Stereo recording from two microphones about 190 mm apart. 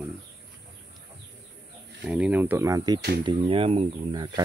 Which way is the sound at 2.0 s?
5° right (ahead or behind).